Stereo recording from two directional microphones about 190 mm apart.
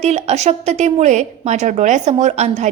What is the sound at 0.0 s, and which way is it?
A woman's voice, 35° right (ahead or behind).